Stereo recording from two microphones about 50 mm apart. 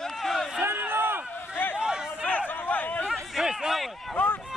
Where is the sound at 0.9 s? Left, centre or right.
Right.